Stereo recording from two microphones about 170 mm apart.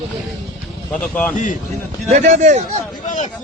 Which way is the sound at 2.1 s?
45° right (ahead or behind).